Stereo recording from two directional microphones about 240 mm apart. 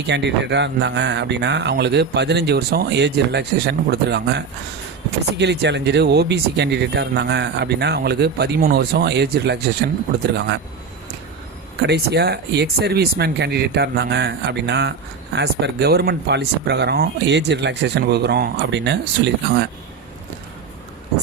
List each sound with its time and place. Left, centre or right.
0.1 s speech: right
11.9 s speech: right